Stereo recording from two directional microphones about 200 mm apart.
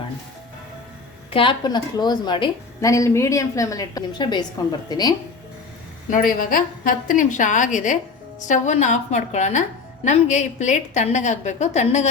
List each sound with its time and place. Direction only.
1.3 s a woman's voice: 25° left (ahead or behind)
6.1 s a woman's voice: 45° left (ahead or behind)